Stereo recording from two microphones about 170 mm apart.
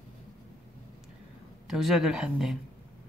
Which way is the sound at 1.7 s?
Centre (ahead or behind).